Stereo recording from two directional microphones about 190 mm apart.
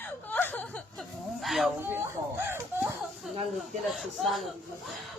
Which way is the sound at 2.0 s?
10° right (ahead or behind).